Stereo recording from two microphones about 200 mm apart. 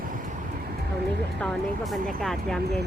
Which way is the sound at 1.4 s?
Centre (ahead or behind).